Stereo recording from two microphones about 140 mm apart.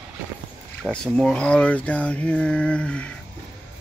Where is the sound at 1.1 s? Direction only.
5° left (ahead or behind).